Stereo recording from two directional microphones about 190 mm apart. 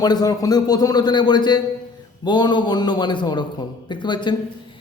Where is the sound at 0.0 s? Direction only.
20° left (ahead or behind).